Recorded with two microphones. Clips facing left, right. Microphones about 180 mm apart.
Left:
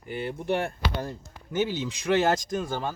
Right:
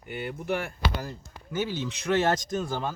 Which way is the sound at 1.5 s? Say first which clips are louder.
Left 3 dB; 15° left (ahead or behind).